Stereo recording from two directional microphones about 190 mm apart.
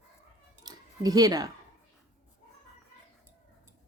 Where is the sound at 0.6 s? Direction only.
20° right (ahead or behind).